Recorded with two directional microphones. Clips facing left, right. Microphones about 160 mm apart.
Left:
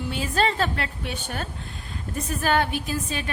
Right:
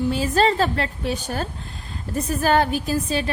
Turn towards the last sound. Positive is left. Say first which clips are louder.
# right 6 dB
turn(degrees=-35)  # may be behind; listen again after turning